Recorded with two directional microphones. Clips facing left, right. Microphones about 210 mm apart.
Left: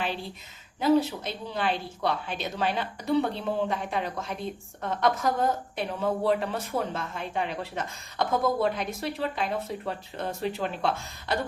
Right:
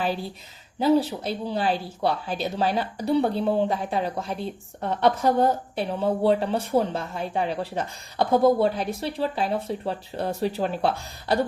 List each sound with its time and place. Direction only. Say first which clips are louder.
0.8 s speech: right 2 dB; 35° right (ahead or behind)